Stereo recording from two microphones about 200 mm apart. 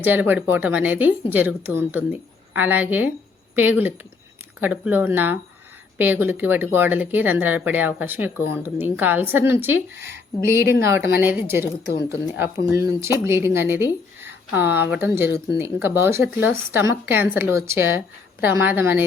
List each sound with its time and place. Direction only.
0.0 s speech: 10° right (ahead or behind)
10.6 s speech: 50° left (ahead or behind)
10.8 s speech: 15° right (ahead or behind)